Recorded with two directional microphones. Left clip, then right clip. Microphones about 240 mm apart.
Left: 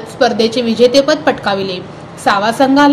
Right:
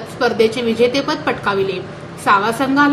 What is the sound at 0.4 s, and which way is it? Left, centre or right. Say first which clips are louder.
A woman's voice: left 1 dB; centre.